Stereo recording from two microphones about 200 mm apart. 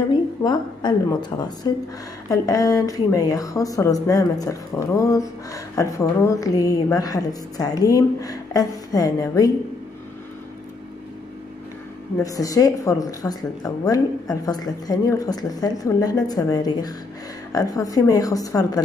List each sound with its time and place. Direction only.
0.1 s a woman's voice: 20° left (ahead or behind)
2.2 s speech: 20° left (ahead or behind)
12.2 s a woman's voice: 15° left (ahead or behind)